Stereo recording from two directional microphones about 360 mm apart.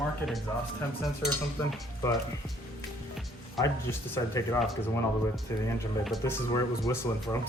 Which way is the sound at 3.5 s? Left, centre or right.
Centre.